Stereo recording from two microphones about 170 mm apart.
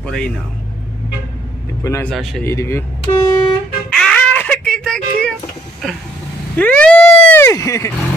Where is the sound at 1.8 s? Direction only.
15° left (ahead or behind).